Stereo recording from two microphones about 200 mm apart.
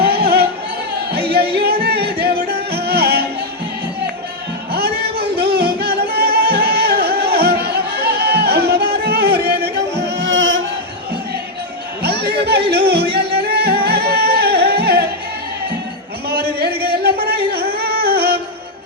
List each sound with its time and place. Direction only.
0.0 s music: 55° right (ahead or behind)
4.7 s music: 50° right (ahead or behind); by 10.6 s 70° right (ahead or behind)
12.0 s chatter: 55° right (ahead or behind)
12.7 s music: 55° right (ahead or behind)
16.3 s a sound: 50° right (ahead or behind)
16.8 s music: 55° right (ahead or behind)